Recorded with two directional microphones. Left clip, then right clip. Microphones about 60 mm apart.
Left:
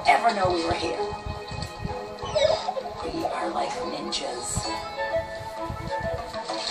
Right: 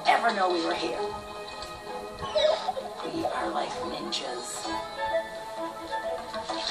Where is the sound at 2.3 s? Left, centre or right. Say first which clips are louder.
Left 2 dB; right.